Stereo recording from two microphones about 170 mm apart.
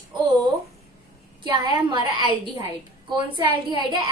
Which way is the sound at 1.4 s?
25° right (ahead or behind).